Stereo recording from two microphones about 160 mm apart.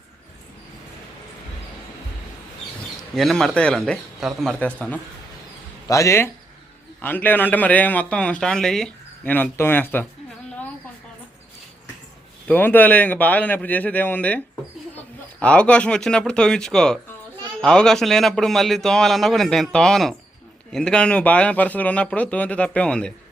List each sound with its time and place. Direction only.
3.2 s a man's voice: centre (ahead or behind)
5.9 s a man's voice: 20° left (ahead or behind)
12.5 s a man's voice: 10° left (ahead or behind)